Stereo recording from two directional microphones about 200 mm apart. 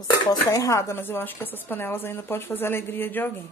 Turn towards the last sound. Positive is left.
turn(degrees=10)  # may be behind; listen again after turning